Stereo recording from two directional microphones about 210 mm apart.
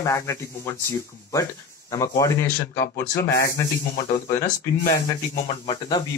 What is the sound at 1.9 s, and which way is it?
Speech, 15° left (ahead or behind).